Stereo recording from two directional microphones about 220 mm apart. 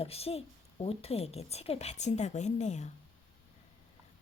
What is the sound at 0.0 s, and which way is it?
Speech, 25° left (ahead or behind).